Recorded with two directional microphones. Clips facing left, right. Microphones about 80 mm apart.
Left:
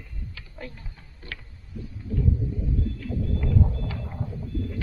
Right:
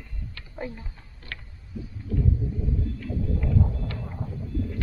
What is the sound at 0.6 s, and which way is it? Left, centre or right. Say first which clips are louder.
Speech: right 6 dB; centre.